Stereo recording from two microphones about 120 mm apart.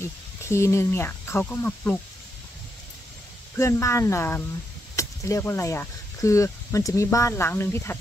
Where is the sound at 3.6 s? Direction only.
25° left (ahead or behind).